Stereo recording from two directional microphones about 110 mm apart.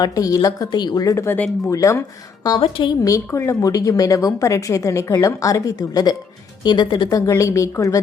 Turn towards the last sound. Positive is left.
turn(degrees=30)  # may be behind; listen again after turning